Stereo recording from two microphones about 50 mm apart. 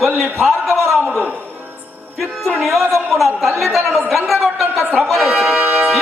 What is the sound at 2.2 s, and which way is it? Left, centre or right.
Speech, centre.